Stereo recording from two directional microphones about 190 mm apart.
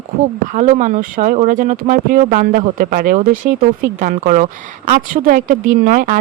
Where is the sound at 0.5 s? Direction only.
40° right (ahead or behind).